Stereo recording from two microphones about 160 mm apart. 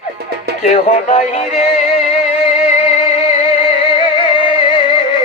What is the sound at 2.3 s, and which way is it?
Music, 40° left (ahead or behind).